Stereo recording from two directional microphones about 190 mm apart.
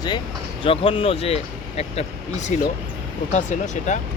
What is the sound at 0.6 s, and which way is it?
Speech, 30° left (ahead or behind).